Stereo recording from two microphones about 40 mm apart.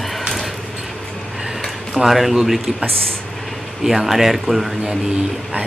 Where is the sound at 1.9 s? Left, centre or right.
Centre.